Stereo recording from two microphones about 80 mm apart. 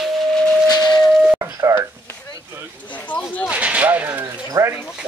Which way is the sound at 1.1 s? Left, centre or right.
Centre.